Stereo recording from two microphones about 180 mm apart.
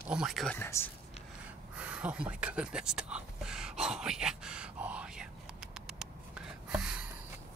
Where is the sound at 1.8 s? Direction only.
5° right (ahead or behind).